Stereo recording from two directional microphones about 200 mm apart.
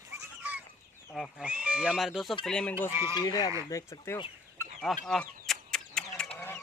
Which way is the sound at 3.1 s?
20° left (ahead or behind).